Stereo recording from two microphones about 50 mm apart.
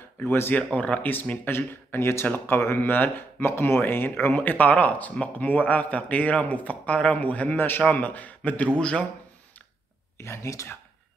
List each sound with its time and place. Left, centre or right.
0.2 s speech: left
0.7 s speech: left
1.3 s speech: left
4.3 s speech: left
7.5 s speech: left
7.8 s speech: left
10.1 s speech: left